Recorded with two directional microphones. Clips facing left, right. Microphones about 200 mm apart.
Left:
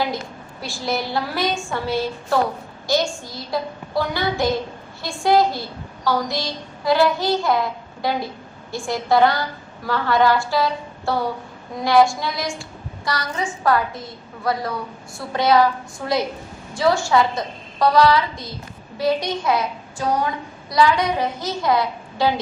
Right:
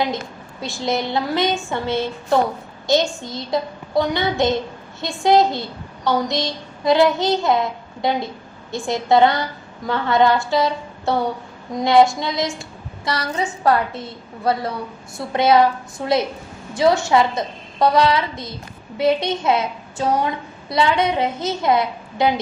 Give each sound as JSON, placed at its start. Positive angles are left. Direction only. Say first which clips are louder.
{"t": 0.6, "sound": "a woman's voice", "louder": "right 3 dB", "side_deg": -20}
{"t": 15.3, "sound": "a woman's voice", "louder": "right 2 dB", "side_deg": -25}